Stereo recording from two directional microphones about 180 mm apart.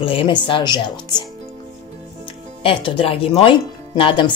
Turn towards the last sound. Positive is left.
turn(degrees=30)  # may be behind; listen again after turning